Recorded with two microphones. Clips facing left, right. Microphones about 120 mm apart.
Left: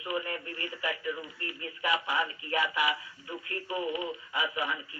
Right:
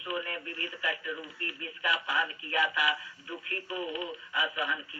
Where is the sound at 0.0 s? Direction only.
25° left (ahead or behind).